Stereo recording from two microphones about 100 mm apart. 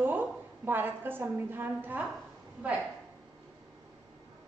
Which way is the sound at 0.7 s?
20° right (ahead or behind).